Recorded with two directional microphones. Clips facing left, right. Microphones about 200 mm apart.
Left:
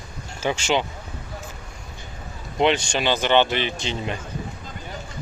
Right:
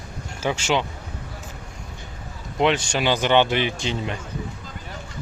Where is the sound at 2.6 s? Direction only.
5° right (ahead or behind).